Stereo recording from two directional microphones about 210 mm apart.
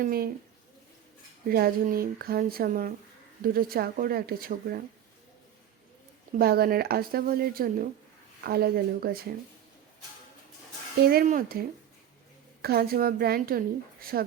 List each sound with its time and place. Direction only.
0.0 s a woman's voice: 45° right (ahead or behind)
1.5 s a woman's voice: 45° right (ahead or behind)
6.4 s a woman's voice: 45° right (ahead or behind)
11.1 s a woman's voice: 45° right (ahead or behind)
12.6 s a woman's voice: 45° right (ahead or behind)